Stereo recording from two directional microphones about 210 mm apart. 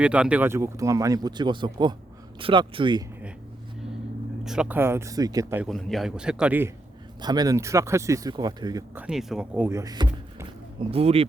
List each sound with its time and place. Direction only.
0.0 s speech: 5° right (ahead or behind); by 3.0 s 20° right (ahead or behind)
4.4 s speech: 5° right (ahead or behind)
5.6 s a man's voice: centre (ahead or behind)
7.2 s speech: 20° right (ahead or behind)
9.0 s speech: 5° right (ahead or behind); by 11.3 s 30° right (ahead or behind)